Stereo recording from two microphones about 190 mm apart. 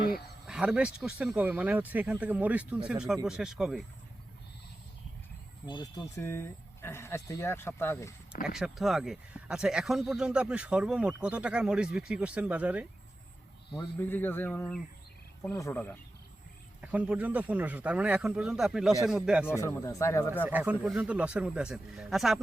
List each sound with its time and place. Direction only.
0.4 s speech: 5° right (ahead or behind)
5.6 s speech: 25° left (ahead or behind)
8.4 s speech: centre (ahead or behind)
14.0 s speech: 10° left (ahead or behind)
16.8 s speech: 5° right (ahead or behind)
19.5 s speech: 15° left (ahead or behind)
20.5 s speech: 10° right (ahead or behind)